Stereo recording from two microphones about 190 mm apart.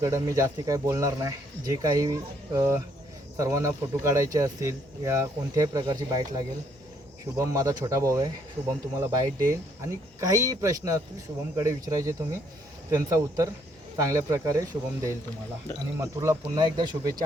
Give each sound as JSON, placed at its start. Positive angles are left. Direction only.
{"t": 0.0, "sound": "speech", "side_deg": -15}